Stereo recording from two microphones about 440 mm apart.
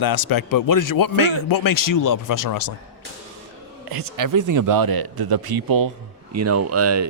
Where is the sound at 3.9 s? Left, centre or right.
Right.